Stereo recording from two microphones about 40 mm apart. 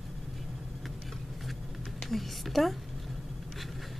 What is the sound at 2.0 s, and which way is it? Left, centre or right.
Speech, centre.